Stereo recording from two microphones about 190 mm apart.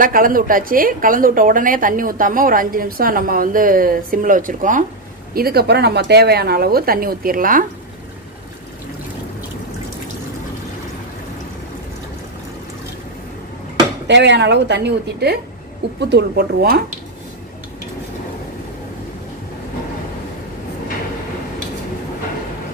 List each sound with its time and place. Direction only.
0.0 s a woman's voice: 45° right (ahead or behind)
5.3 s a woman's voice: 55° right (ahead or behind)
14.0 s a woman's voice: 65° right (ahead or behind)